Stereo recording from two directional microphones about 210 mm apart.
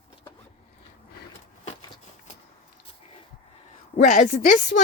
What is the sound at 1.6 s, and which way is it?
Shuffling cards, 35° left (ahead or behind).